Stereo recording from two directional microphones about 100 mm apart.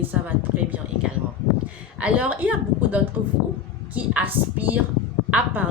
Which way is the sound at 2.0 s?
15° right (ahead or behind).